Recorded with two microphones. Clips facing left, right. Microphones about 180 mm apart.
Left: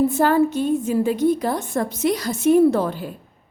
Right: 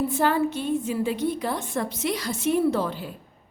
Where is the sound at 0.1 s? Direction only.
45° left (ahead or behind).